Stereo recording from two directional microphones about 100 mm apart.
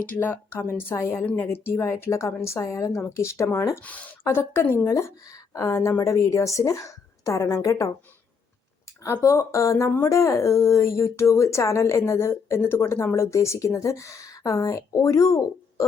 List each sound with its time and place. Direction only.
0.0 s speech: 20° left (ahead or behind)
3.8 s a woman's voice: 15° left (ahead or behind); by 7.9 s 35° left (ahead or behind)
9.2 s speech: 30° left (ahead or behind)